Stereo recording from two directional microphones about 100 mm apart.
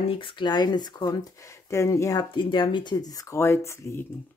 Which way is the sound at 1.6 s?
30° left (ahead or behind).